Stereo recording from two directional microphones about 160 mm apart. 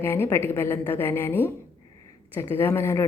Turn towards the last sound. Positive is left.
turn(degrees=15)  # may be behind; listen again after turning